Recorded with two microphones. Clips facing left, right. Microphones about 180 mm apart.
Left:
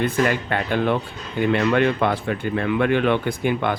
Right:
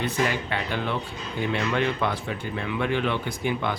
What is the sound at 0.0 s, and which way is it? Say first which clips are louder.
Speech: left 5 dB; 55° left (ahead or behind).